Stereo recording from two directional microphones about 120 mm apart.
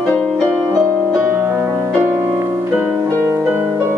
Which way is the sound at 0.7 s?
20° right (ahead or behind).